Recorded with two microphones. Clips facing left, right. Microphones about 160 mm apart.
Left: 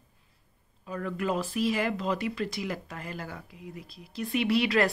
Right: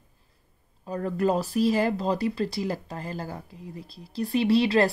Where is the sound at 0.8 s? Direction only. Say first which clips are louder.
Right 6 dB; 35° right (ahead or behind).